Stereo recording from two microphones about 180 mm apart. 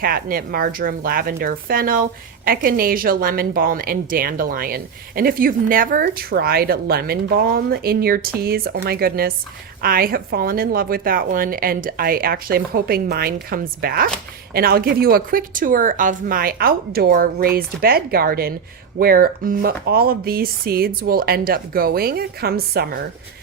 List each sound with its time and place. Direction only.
0.0 s speech: 55° right (ahead or behind)